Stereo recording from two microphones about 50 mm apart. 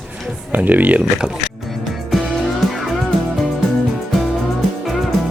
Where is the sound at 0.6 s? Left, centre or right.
Right.